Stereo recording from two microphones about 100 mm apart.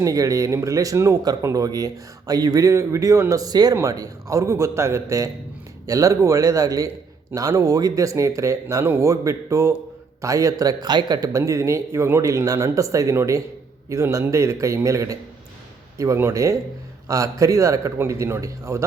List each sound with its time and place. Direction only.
0.0 s speech: 35° right (ahead or behind)
8.8 s speech: 20° right (ahead or behind)
9.0 s speech: 30° right (ahead or behind)